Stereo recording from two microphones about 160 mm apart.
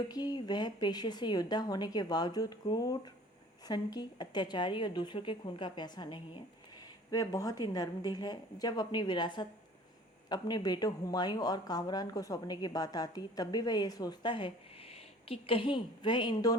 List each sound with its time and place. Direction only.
0.1 s a woman's voice: 25° left (ahead or behind)